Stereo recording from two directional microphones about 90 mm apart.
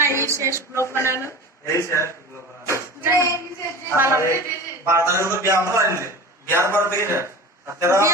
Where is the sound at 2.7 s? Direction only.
30° right (ahead or behind).